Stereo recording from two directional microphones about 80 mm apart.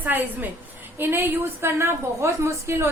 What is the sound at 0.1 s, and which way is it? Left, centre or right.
A woman's voice, right.